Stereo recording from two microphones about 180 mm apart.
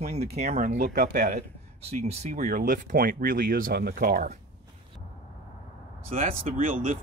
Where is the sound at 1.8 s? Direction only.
35° right (ahead or behind).